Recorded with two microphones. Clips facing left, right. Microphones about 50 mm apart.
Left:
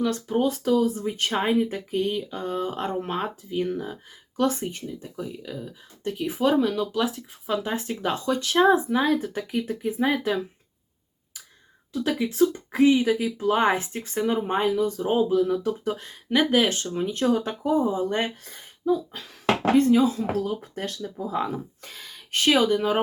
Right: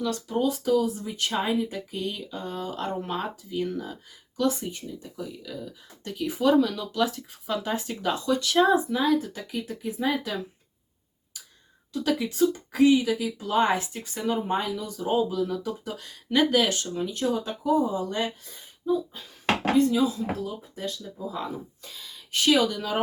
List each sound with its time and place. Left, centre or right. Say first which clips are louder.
0.0 s speech: left 3 dB; left
4.4 s speech: left 2 dB; left
6.9 s speech: even; centre
12.0 s speech: left 2 dB; centre
12.5 s speech: left 1 dB; left
14.5 s speech: left 5 dB; left
17.7 s speech: left 1 dB; left
18.5 s speech: left 3 dB; left
19.7 s speech: left 3 dB; left
20.4 s speech: left 4 dB; left
21.0 s speech: left 5 dB; left